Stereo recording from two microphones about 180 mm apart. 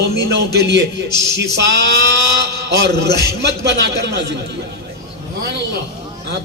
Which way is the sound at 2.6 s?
70° right (ahead or behind).